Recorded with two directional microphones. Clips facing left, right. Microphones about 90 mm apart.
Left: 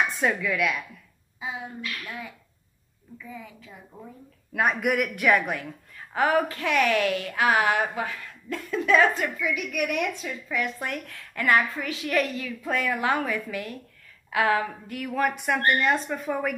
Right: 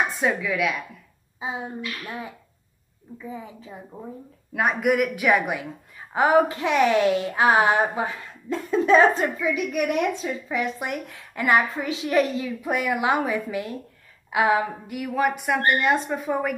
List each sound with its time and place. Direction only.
0.4 s a woman's voice: 5° right (ahead or behind)
1.4 s a child's voice: 30° right (ahead or behind)
1.8 s a woman's voice: 20° right (ahead or behind)
2.0 s a child's voice: 30° right (ahead or behind)
4.6 s a woman's voice: centre (ahead or behind)
5.7 s a woman's voice: 20° right (ahead or behind)